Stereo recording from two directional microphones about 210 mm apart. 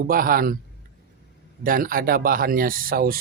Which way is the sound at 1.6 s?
40° right (ahead or behind).